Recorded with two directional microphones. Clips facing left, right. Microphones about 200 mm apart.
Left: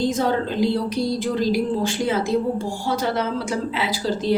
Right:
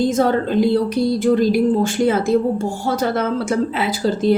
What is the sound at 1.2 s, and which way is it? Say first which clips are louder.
A woman's voice: right 9 dB; 50° right (ahead or behind).